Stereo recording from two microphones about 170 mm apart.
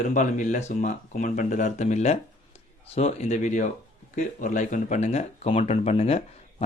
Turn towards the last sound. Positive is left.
turn(degrees=35)  # may be behind; listen again after turning